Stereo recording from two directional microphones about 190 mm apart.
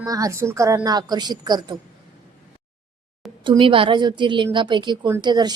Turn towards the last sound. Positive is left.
turn(degrees=-20)  # may be behind; listen again after turning